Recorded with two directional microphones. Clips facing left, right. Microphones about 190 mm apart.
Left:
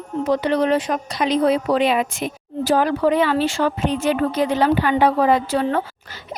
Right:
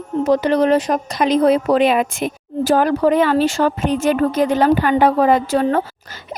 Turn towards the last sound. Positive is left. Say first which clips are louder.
# right 3 dB
turn(degrees=-45)  # may be behind; listen again after turning